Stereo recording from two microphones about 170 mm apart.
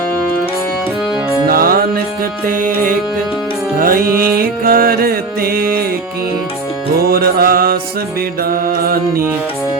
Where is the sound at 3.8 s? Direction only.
55° right (ahead or behind).